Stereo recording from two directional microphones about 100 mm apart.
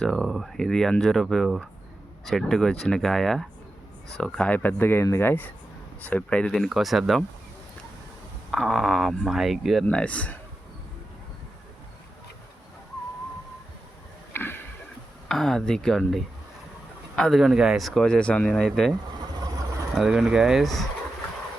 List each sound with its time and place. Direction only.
0.0 s speech: centre (ahead or behind)
8.4 s speech: centre (ahead or behind)
9.8 s speech: 10° left (ahead or behind)
14.3 s a sound: 20° left (ahead or behind)
15.3 s speech: 5° left (ahead or behind)